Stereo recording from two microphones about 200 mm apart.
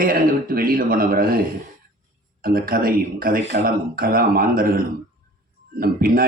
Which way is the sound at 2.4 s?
45° right (ahead or behind).